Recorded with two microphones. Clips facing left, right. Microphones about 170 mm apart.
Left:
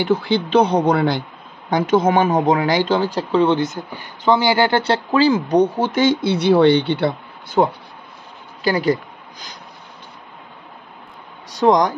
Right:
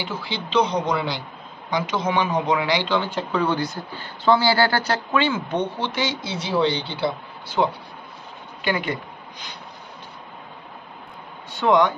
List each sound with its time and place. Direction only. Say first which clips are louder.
0.0 s speech: left 12 dB; 55° left (ahead or behind)
8.6 s speech: left 7 dB; 35° left (ahead or behind)
11.5 s speech: left 3 dB; 40° left (ahead or behind)